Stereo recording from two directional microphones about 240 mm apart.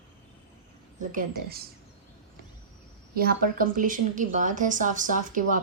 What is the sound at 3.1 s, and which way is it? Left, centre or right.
A woman's voice, right.